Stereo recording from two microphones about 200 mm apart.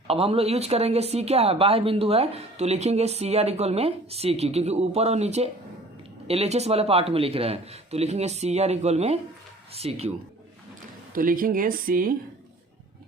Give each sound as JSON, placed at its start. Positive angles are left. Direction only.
{"t": 0.1, "sound": "speech", "side_deg": -30}
{"t": 11.1, "sound": "speech", "side_deg": -45}